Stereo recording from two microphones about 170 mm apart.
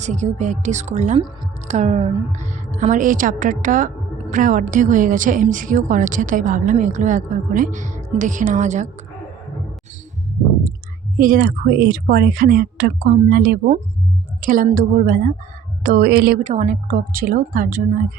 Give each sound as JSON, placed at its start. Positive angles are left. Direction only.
{"t": 0.0, "sound": "a woman's voice", "side_deg": -45}
{"t": 11.2, "sound": "a woman's voice", "side_deg": -60}
{"t": 16.4, "sound": "a woman's voice", "side_deg": -45}